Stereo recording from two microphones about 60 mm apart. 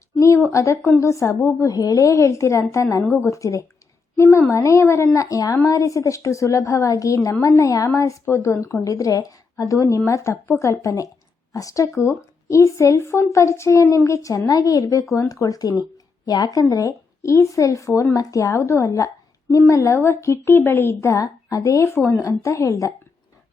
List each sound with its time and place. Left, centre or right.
0.5 s speech: left
1.4 s a child's voice: left
1.7 s speech: left
4.2 s a child's voice: left
7.9 s a child's voice: left
8.6 s speech: left
18.1 s speech: left
18.5 s a woman's voice: left
20.0 s a child's voice: left
21.1 s speech: left